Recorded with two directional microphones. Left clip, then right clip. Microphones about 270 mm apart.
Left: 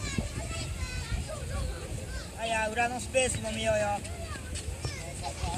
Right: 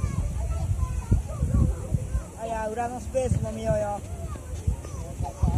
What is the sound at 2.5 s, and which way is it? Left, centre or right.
Speech, centre.